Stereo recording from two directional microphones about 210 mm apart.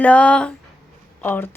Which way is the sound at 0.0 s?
5° left (ahead or behind).